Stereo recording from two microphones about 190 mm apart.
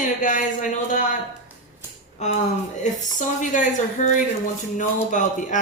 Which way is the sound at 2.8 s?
40° left (ahead or behind).